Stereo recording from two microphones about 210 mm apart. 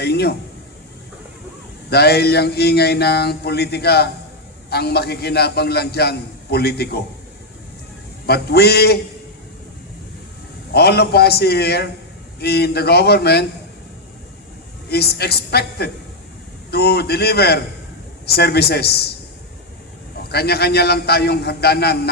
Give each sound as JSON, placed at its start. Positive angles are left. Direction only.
{"t": 0.0, "sound": "a man's voice", "side_deg": 50}
{"t": 1.9, "sound": "a man's voice", "side_deg": 50}
{"t": 8.3, "sound": "a man's voice", "side_deg": 50}
{"t": 10.7, "sound": "a man's voice", "side_deg": 50}
{"t": 14.8, "sound": "a man's voice", "side_deg": 50}
{"t": 20.3, "sound": "a man's voice", "side_deg": 50}